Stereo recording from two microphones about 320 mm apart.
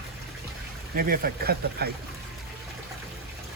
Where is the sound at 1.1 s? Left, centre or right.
Right.